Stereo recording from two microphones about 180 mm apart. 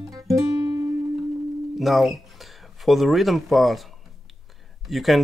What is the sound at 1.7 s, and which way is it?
Speech, centre (ahead or behind).